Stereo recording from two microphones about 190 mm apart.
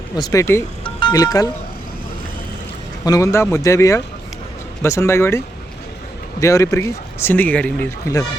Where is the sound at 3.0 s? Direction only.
15° left (ahead or behind).